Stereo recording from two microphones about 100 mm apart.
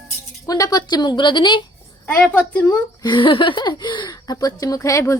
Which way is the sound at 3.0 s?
55° left (ahead or behind).